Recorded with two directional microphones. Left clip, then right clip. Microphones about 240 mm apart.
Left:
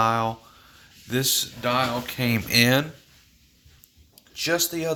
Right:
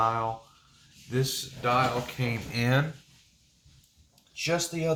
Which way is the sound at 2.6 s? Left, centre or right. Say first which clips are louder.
Left 8 dB; left.